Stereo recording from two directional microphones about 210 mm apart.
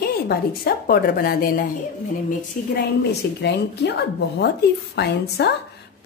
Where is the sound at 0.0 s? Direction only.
45° left (ahead or behind).